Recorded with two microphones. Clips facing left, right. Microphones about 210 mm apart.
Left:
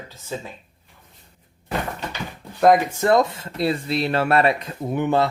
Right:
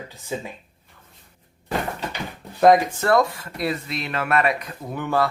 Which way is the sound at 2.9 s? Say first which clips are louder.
Left 1 dB; 15° left (ahead or behind).